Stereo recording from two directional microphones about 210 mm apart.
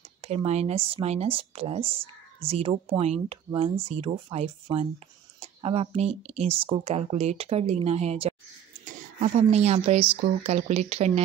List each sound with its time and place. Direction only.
0.2 s a woman's voice: 30° right (ahead or behind)